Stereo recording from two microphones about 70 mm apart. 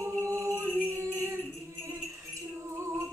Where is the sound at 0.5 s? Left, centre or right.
Right.